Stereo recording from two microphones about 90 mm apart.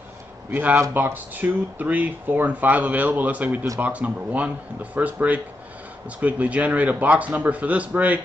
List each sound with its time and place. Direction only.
0.5 s a man's voice: 20° right (ahead or behind)